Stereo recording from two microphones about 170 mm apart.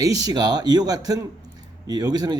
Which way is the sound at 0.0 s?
20° right (ahead or behind).